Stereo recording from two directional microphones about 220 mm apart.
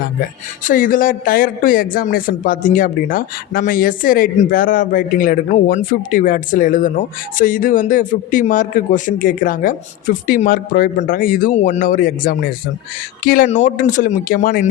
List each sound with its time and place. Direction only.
0.6 s speech: 40° left (ahead or behind)